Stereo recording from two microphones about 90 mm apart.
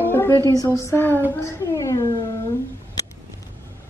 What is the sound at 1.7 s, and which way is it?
Speech, 35° left (ahead or behind).